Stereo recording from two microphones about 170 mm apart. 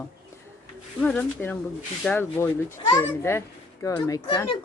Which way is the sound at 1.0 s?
10° left (ahead or behind).